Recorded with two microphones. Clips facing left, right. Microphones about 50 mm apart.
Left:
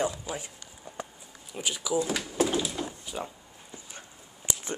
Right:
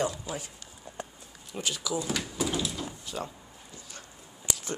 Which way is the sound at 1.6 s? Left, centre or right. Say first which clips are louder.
Left 2 dB; centre.